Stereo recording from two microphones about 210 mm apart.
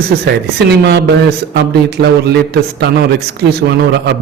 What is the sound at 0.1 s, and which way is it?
Speech, 50° right (ahead or behind).